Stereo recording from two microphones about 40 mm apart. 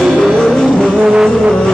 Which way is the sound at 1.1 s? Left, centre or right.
Centre.